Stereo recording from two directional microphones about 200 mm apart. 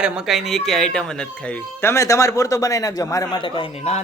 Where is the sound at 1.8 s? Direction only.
15° left (ahead or behind); by 4.0 s 30° left (ahead or behind).